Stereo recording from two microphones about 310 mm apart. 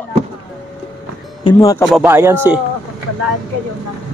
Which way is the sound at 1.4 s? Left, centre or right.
Centre.